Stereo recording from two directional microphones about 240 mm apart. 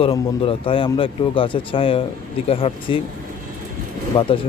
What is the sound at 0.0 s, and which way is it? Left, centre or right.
Speech, left.